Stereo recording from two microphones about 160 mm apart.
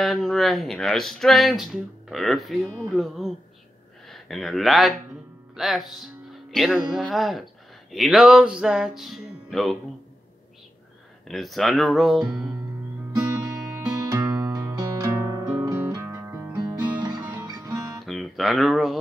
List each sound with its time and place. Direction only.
0.0 s speech: centre (ahead or behind)
11.2 s speech: centre (ahead or behind)
14.0 s music: 20° right (ahead or behind)
16.5 s music: 25° right (ahead or behind)
18.0 s a sound: centre (ahead or behind)